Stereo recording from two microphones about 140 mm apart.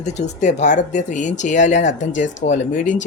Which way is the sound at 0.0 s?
55° left (ahead or behind).